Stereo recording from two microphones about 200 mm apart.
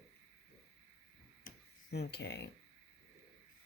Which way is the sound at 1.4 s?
55° left (ahead or behind).